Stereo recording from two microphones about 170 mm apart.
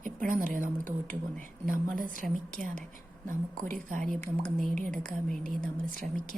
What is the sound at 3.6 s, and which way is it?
Speech, 50° right (ahead or behind).